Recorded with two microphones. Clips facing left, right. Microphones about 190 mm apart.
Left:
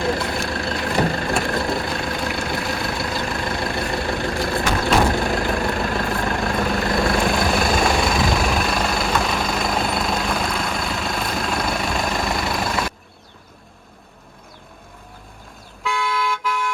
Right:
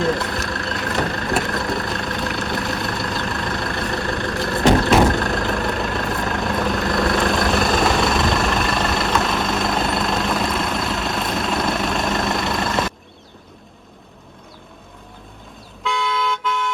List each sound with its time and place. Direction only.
0.0 s vehicle: centre (ahead or behind)
0.4 s vehicle: 30° left (ahead or behind)
0.8 s vehicle: centre (ahead or behind)
1.5 s vehicle: 30° left (ahead or behind)
1.7 s vehicle: centre (ahead or behind)
15.8 s toot: centre (ahead or behind)